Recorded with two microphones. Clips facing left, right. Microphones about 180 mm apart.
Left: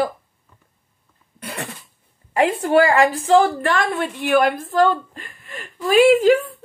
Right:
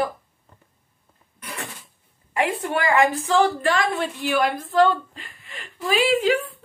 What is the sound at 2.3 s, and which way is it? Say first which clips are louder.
A woman's voice: left 8 dB; 35° left (ahead or behind).